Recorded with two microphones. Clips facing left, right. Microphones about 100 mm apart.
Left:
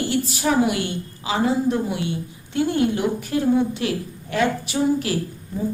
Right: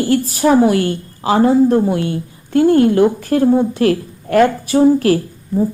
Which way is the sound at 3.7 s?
55° right (ahead or behind).